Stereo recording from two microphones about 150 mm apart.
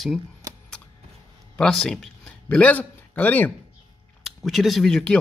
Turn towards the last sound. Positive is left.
turn(degrees=5)  # may be behind; listen again after turning